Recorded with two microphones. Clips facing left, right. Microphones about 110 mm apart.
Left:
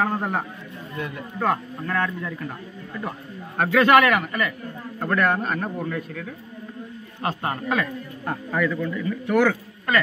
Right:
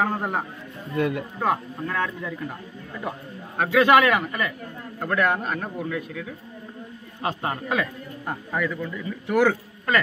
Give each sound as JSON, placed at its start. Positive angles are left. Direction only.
{"t": 0.0, "sound": "speech", "side_deg": -5}
{"t": 0.9, "sound": "speech", "side_deg": -70}
{"t": 1.4, "sound": "a man's voice", "side_deg": -10}
{"t": 3.8, "sound": "speech", "side_deg": -20}
{"t": 5.0, "sound": "a man's voice", "side_deg": -5}
{"t": 7.2, "sound": "speech", "side_deg": -20}
{"t": 9.4, "sound": "a man's voice", "side_deg": -25}